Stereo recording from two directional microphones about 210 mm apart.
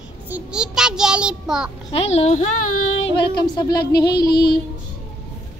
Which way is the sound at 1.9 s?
30° left (ahead or behind).